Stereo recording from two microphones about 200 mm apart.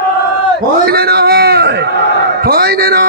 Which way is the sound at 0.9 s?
50° right (ahead or behind).